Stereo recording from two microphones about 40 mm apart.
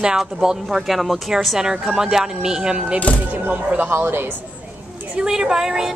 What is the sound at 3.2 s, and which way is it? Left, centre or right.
Speech, right.